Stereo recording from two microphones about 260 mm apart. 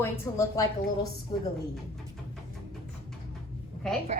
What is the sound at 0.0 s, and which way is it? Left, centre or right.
Speech, centre.